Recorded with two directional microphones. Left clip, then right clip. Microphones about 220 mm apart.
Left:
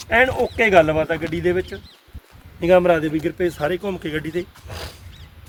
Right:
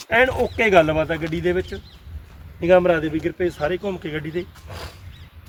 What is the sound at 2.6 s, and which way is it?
A man's voice, 40° left (ahead or behind).